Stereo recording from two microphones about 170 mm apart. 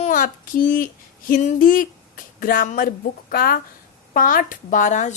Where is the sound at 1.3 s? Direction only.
50° left (ahead or behind).